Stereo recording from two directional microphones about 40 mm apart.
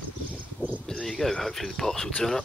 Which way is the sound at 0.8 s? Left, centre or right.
Centre.